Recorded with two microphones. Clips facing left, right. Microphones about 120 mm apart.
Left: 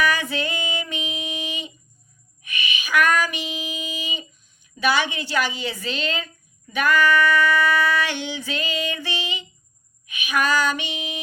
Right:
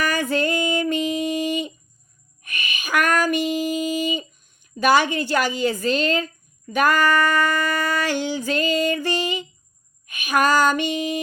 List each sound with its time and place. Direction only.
0.0 s female singing: 45° right (ahead or behind)
2.4 s a sound: 45° right (ahead or behind)
10.1 s female singing: 45° right (ahead or behind)